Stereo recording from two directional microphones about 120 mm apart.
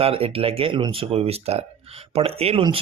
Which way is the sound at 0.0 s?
50° right (ahead or behind).